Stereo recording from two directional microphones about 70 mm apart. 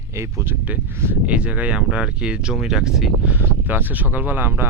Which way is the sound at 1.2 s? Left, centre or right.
Centre.